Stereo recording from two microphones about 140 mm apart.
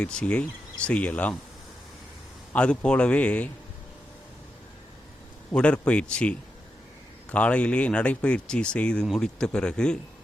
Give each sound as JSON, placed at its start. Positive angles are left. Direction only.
{"t": 0.0, "sound": "speech", "side_deg": 5}
{"t": 2.5, "sound": "speech", "side_deg": 10}
{"t": 5.5, "sound": "speech", "side_deg": 5}